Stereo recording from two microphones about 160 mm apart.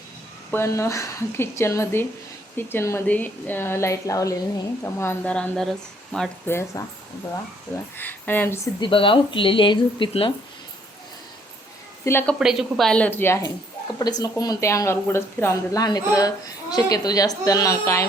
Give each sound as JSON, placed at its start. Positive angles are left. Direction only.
{"t": 0.5, "sound": "speech", "side_deg": 15}
{"t": 7.9, "sound": "speech", "side_deg": 10}
{"t": 8.8, "sound": "speech", "side_deg": 35}
{"t": 12.0, "sound": "speech", "side_deg": 10}
{"t": 12.4, "sound": "speech", "side_deg": 0}